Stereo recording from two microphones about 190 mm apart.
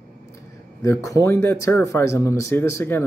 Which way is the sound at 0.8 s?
15° left (ahead or behind).